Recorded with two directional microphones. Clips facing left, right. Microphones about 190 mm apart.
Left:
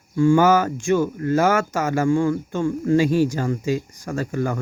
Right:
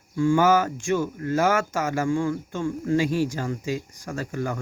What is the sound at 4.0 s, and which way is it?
Speech, 60° left (ahead or behind).